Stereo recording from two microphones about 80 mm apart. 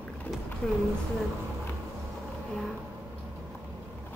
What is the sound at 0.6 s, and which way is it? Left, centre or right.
Speech, centre.